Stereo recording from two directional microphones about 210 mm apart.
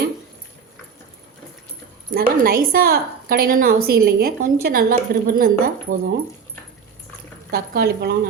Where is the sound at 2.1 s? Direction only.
45° right (ahead or behind).